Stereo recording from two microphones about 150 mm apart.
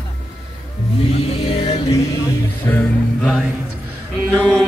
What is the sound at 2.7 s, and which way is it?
Music, 20° left (ahead or behind).